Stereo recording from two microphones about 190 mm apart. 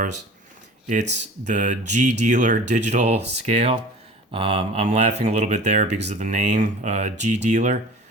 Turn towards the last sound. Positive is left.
turn(degrees=-40)  # may be behind; listen again after turning